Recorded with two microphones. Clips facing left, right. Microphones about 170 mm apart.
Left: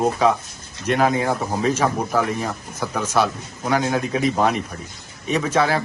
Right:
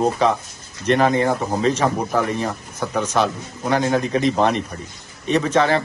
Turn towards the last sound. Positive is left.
turn(degrees=5)  # may be behind; listen again after turning